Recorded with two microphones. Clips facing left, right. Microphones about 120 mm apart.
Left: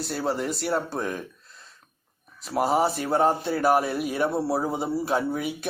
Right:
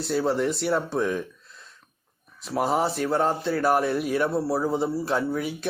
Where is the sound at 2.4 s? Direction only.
5° left (ahead or behind).